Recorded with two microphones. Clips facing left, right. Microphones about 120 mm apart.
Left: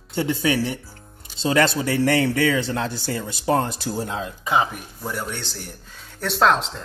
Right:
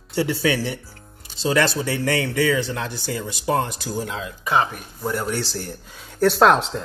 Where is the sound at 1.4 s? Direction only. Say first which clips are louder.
Left 1 dB; 25° left (ahead or behind).